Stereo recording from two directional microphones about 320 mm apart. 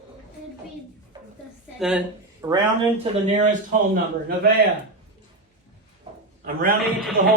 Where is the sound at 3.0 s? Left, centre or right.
Right.